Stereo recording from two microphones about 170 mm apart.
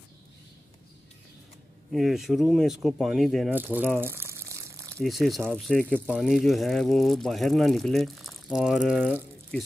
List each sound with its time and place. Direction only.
1.9 s speech: centre (ahead or behind)
3.5 s speech: 10° right (ahead or behind)
4.0 s crumpling: 15° right (ahead or behind)
5.0 s speech: centre (ahead or behind)